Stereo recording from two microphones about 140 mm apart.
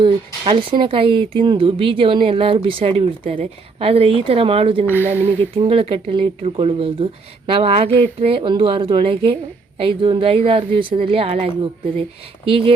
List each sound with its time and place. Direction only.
0.0 s speech: 35° right (ahead or behind)